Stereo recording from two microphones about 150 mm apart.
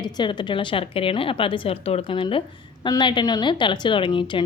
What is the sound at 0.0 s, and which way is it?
A woman's voice, 30° left (ahead or behind).